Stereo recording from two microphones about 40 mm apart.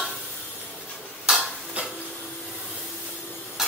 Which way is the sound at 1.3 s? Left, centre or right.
Centre.